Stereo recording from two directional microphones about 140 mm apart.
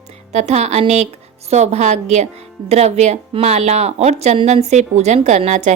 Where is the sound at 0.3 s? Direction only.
50° right (ahead or behind).